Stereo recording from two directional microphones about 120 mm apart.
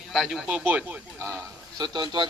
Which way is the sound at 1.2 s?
25° right (ahead or behind).